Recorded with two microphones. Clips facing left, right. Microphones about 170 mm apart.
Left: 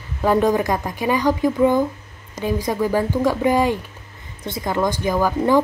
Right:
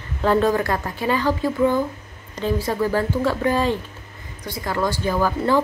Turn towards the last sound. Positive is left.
turn(degrees=15)  # may be behind; listen again after turning